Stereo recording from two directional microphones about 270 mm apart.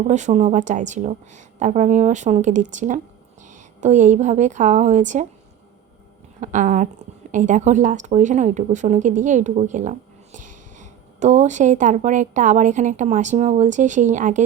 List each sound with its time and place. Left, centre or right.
0.1 s a woman's voice: right
6.4 s a woman's voice: right